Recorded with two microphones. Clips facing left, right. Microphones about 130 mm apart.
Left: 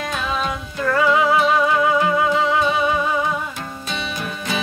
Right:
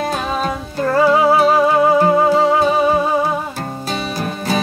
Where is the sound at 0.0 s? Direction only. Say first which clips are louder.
Right 4 dB; 40° right (ahead or behind).